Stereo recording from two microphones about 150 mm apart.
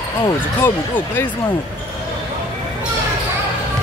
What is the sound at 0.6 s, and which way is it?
Speech, 15° left (ahead or behind).